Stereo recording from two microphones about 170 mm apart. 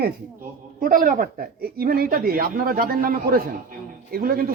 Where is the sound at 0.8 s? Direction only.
55° right (ahead or behind).